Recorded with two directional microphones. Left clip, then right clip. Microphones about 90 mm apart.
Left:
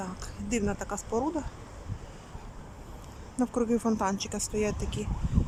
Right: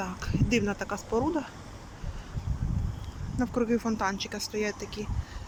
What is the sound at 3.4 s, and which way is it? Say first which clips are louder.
Speech: even; 30° left (ahead or behind).